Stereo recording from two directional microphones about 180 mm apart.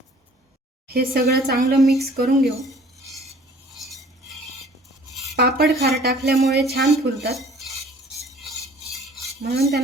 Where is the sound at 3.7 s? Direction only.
Centre (ahead or behind).